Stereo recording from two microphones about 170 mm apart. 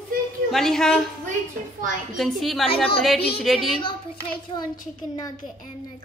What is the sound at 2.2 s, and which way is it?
Speech, centre (ahead or behind).